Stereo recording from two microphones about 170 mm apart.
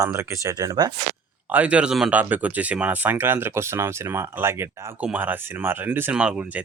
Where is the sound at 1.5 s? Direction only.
10° right (ahead or behind).